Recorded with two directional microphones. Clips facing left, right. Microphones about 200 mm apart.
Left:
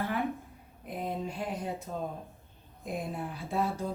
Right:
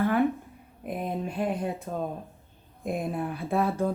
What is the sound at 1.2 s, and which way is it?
Speech, 60° right (ahead or behind).